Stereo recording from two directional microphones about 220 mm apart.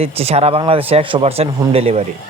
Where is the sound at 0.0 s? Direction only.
25° right (ahead or behind).